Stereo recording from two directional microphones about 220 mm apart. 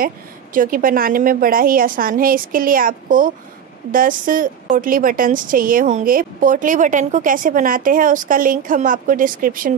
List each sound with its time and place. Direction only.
0.0 s a woman's voice: 40° right (ahead or behind)